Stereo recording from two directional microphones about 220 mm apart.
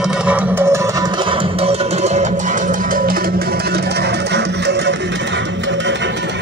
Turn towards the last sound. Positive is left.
turn(degrees=-50)  # may be behind; listen again after turning